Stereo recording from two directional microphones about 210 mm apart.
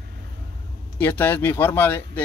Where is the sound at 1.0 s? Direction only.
10° left (ahead or behind).